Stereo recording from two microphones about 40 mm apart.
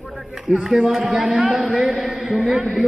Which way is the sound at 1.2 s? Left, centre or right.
Right.